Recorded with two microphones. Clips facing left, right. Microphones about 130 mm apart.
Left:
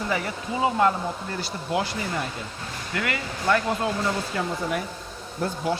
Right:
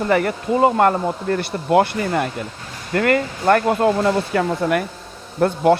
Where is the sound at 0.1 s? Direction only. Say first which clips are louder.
Right 10 dB; 60° right (ahead or behind).